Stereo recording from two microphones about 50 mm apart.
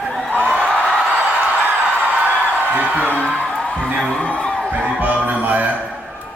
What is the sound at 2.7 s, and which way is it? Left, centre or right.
Music, right.